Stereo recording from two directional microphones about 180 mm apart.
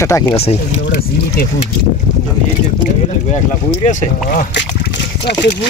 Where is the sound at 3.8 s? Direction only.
45° left (ahead or behind).